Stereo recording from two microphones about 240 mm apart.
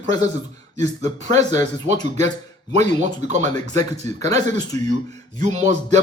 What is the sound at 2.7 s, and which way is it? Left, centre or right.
Speech, right.